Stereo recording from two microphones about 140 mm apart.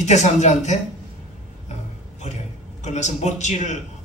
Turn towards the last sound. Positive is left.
turn(degrees=55)  # may be behind; listen again after turning